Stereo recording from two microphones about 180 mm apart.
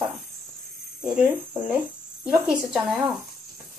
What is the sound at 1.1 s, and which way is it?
Speech, 10° right (ahead or behind).